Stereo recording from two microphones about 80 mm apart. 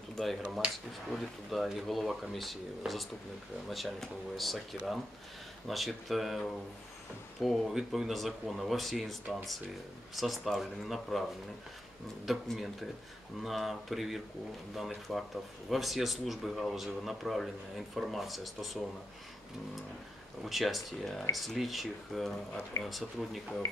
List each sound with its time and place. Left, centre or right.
0.4 s speech: centre
1.1 s speech: centre
5.7 s speech: centre
12.3 s speech: centre
20.4 s speech: centre